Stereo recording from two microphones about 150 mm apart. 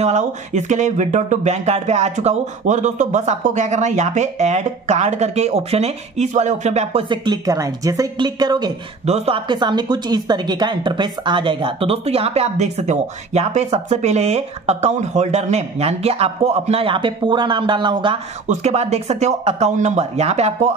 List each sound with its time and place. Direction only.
0.0 s speech: 50° right (ahead or behind); by 8.7 s 25° right (ahead or behind)
9.0 s speech: 45° right (ahead or behind)
9.5 s speech: 30° right (ahead or behind)
18.5 s speech: 45° right (ahead or behind)